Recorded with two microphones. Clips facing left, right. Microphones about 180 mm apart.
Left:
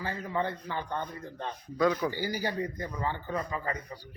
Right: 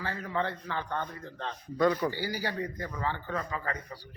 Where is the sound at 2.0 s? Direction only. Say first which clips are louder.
Left 1 dB; 15° left (ahead or behind).